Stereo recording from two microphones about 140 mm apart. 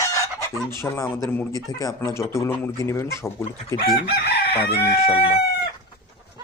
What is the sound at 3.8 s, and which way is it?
Chicken, 90° left.